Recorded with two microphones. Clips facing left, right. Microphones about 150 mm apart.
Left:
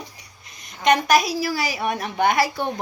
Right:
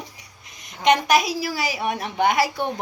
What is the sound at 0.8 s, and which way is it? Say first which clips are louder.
Music: even; 20° right (ahead or behind).